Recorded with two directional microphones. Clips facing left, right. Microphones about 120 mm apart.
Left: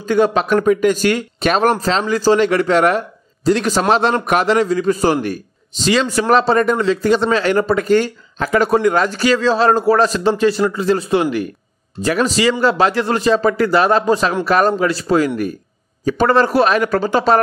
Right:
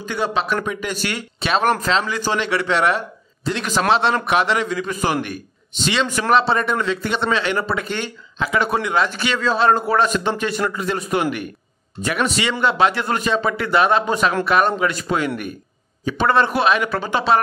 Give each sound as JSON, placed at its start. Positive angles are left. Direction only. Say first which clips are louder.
{"t": 0.0, "sound": "speech", "louder": "left 8 dB", "side_deg": 45}